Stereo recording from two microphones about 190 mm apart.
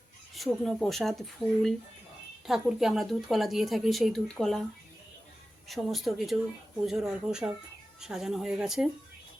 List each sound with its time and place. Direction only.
0.3 s a woman's voice: centre (ahead or behind)
5.6 s a woman's voice: centre (ahead or behind)